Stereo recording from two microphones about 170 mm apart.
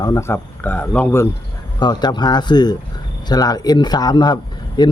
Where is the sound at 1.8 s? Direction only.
25° left (ahead or behind).